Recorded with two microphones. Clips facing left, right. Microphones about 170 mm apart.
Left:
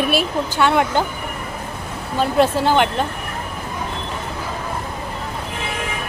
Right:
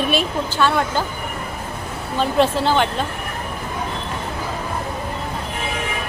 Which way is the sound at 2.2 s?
10° left (ahead or behind).